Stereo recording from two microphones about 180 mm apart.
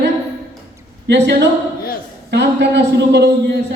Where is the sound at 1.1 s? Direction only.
75° right (ahead or behind).